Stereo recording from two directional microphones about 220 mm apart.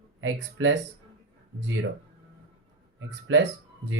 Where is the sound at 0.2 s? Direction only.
55° right (ahead or behind).